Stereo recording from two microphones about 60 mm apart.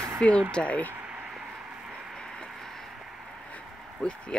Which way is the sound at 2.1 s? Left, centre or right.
Centre.